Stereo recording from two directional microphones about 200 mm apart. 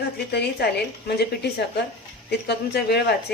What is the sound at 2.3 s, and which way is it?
Speech, 55° left (ahead or behind).